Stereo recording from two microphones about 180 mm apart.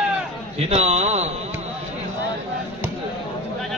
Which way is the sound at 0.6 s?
35° right (ahead or behind).